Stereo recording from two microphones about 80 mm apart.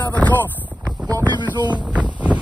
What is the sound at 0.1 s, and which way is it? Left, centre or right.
Chopping, left.